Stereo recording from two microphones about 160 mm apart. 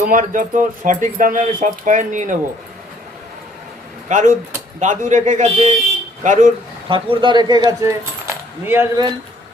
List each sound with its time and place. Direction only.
0.0 s speech: 55° right (ahead or behind)
4.1 s speech: 50° right (ahead or behind)
6.8 s speech: 30° right (ahead or behind); by 8.9 s 15° right (ahead or behind)